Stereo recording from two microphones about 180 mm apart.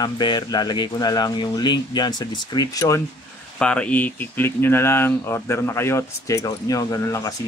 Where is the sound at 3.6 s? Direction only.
5° left (ahead or behind).